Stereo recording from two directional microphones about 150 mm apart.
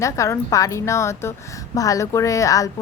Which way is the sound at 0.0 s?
20° left (ahead or behind).